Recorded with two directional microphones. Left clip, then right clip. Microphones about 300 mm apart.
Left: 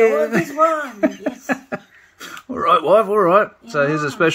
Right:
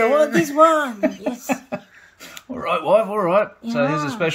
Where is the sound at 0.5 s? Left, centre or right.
Right.